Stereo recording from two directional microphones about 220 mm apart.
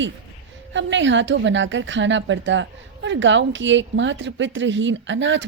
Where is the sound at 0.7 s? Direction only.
55° right (ahead or behind).